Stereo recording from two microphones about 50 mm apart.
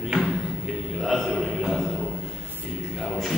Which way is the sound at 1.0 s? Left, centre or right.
Centre.